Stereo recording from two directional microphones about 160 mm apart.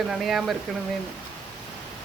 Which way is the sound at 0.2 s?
Centre (ahead or behind).